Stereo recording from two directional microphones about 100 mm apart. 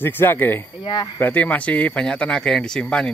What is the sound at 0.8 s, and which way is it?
Speech, 45° left (ahead or behind).